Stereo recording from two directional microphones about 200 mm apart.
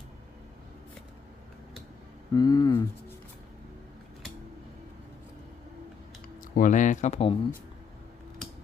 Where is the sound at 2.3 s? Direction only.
20° left (ahead or behind).